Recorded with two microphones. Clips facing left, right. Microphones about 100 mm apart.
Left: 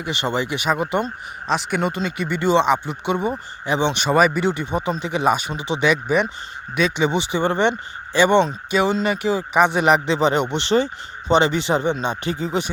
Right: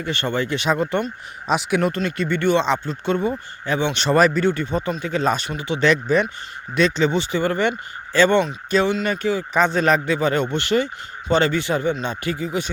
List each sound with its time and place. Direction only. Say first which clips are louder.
0.0 s speech: even; 20° left (ahead or behind)
1.5 s speech: right 2 dB; 5° right (ahead or behind)
2.0 s speech: right 1 dB; 5° left (ahead or behind); by 3.9 s 25° left (ahead or behind)
3.9 s speech: right 3 dB; 5° left (ahead or behind)
4.4 s speech: right 1 dB; 20° left (ahead or behind)
5.5 s speech: even; 25° left (ahead or behind)
5.8 s speech: right 1 dB; 10° left (ahead or behind)
9.5 s speech: left 2 dB; 15° left (ahead or behind)